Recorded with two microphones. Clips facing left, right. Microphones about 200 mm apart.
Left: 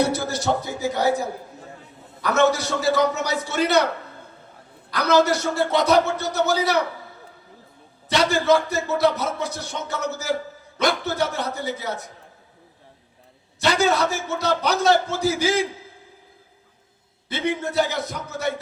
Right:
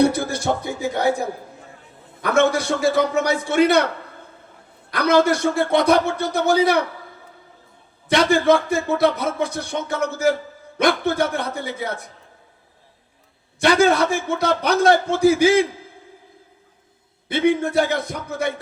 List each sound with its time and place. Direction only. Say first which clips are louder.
0.0 s a sound: right 4 dB; 55° right (ahead or behind)
2.2 s speech: right 2 dB; 55° right (ahead or behind)
4.9 s speech: right 2 dB; 55° right (ahead or behind)
8.1 s speech: right 3 dB; 55° right (ahead or behind)
13.6 s speech: right 4 dB; 55° right (ahead or behind)
17.6 s speech: right 3 dB; 55° right (ahead or behind)